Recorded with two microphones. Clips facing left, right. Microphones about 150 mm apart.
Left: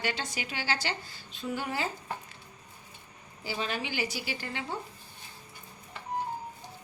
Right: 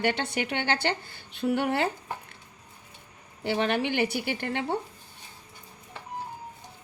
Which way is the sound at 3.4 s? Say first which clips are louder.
Right 8 dB; 65° right (ahead or behind).